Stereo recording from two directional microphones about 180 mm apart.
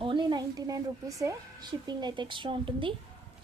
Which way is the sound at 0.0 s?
25° right (ahead or behind).